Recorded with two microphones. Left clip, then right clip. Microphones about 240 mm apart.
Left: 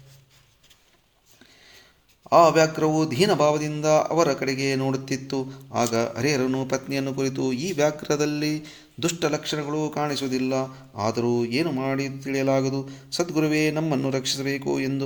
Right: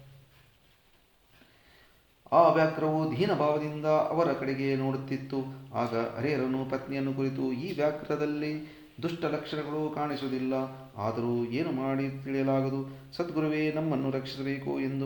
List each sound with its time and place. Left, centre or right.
2.3 s speech: left